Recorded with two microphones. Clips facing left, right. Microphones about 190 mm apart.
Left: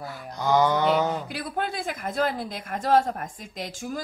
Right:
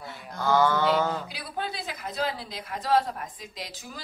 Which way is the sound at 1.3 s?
50° left (ahead or behind).